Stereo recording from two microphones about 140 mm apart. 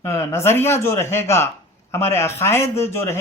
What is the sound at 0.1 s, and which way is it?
A man's voice, 20° left (ahead or behind).